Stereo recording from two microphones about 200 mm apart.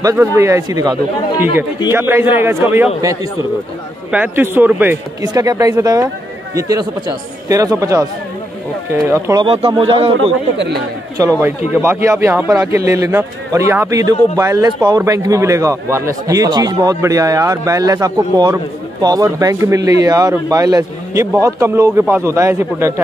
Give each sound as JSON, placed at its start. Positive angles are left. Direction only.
{"t": 0.0, "sound": "a man's voice", "side_deg": -15}
{"t": 4.1, "sound": "a man's voice", "side_deg": -10}
{"t": 11.1, "sound": "a man's voice", "side_deg": -15}